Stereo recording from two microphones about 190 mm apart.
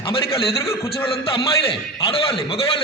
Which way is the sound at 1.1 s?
30° left (ahead or behind).